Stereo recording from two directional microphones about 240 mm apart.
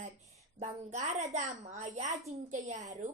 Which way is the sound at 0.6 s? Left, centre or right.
Right.